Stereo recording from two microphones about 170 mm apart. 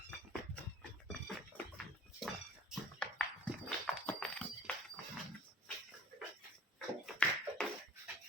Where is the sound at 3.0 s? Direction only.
5° left (ahead or behind).